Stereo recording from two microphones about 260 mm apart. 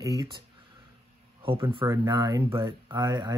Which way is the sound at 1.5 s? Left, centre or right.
Centre.